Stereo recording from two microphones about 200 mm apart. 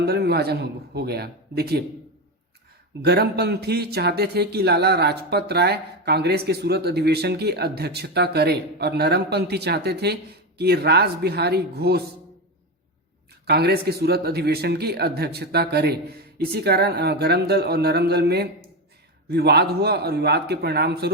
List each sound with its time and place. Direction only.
0.0 s speech: 55° right (ahead or behind)
3.0 s speech: 55° right (ahead or behind)
13.4 s speech: 55° right (ahead or behind)